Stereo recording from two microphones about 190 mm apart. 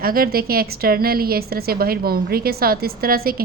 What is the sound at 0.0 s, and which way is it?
A woman's voice, 50° right (ahead or behind).